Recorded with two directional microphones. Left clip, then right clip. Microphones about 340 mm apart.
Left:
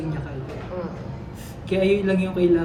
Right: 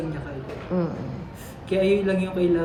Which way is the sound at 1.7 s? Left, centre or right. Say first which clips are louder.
Left 1 dB; centre.